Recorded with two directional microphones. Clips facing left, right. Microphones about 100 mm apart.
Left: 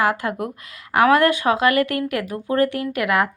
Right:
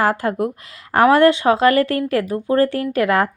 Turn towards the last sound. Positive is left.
turn(degrees=-35)  # may be behind; listen again after turning